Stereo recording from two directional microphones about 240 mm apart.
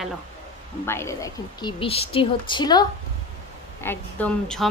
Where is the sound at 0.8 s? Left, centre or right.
Centre.